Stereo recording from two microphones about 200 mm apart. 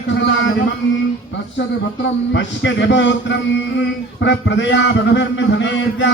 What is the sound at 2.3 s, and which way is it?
Music, 65° left (ahead or behind).